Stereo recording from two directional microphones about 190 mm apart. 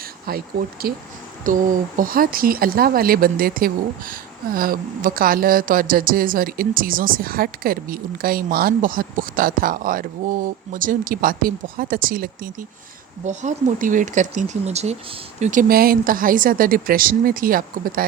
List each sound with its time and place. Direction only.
0.3 s a woman's voice: 50° right (ahead or behind)